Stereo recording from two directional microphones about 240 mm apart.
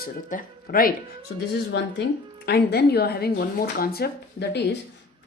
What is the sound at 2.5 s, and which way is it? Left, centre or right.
Speech, left.